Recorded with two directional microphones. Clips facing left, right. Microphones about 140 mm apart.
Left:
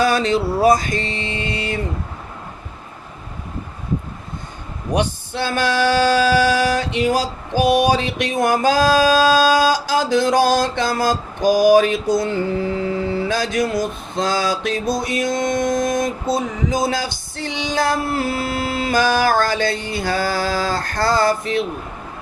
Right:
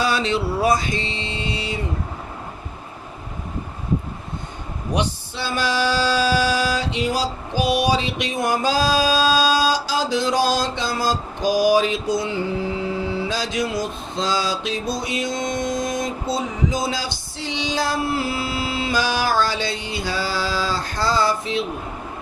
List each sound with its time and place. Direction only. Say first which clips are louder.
0.0 s vehicle: left 4 dB; 45° left (ahead or behind)
4.9 s male singing: left 4 dB; 55° left (ahead or behind)
16.8 s a sound: left 4 dB; 50° left (ahead or behind)